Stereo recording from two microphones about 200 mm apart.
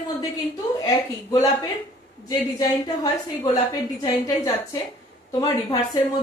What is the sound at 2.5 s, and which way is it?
A woman's voice, 20° left (ahead or behind).